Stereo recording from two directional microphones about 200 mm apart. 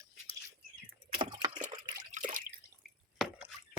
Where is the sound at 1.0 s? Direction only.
25° right (ahead or behind).